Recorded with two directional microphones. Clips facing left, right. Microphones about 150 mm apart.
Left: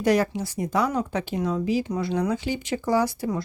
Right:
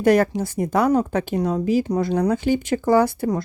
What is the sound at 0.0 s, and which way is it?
Speech, 50° right (ahead or behind).